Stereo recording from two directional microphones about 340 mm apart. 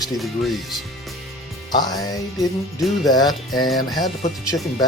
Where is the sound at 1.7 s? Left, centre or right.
Centre.